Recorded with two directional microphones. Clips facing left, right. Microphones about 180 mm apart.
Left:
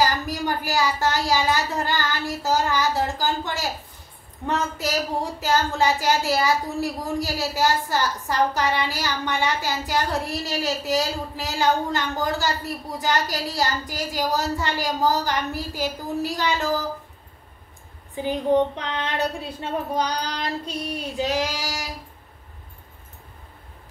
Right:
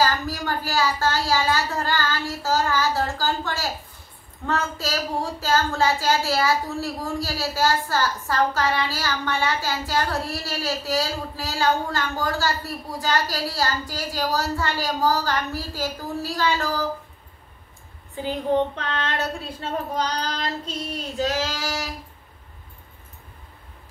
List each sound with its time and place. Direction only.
0.0 s a child's voice: 15° left (ahead or behind)
18.1 s a child's voice: 15° left (ahead or behind)